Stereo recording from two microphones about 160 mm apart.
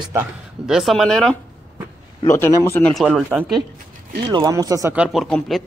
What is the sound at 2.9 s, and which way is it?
Speech, centre (ahead or behind).